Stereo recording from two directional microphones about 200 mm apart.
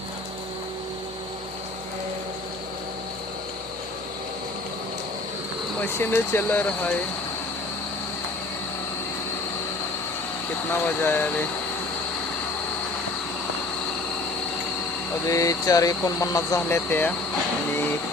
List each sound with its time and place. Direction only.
5.8 s speech: 10° left (ahead or behind)
10.7 s speech: 10° left (ahead or behind)
15.3 s speech: 15° left (ahead or behind)